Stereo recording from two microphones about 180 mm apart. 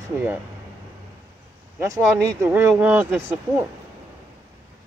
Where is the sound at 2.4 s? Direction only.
10° right (ahead or behind).